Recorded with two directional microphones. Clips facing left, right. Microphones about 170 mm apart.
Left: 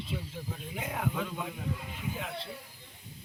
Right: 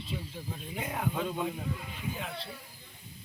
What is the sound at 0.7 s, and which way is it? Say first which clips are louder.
Speech: right 1 dB; 5° left (ahead or behind).